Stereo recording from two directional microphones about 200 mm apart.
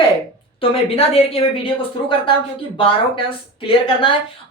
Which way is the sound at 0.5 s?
30° left (ahead or behind).